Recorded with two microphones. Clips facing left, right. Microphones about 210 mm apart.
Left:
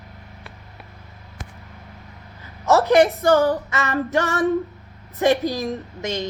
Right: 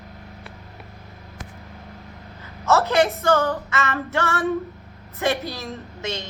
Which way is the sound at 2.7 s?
15° left (ahead or behind).